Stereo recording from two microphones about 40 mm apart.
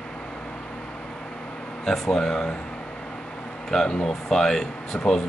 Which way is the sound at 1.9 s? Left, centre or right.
Centre.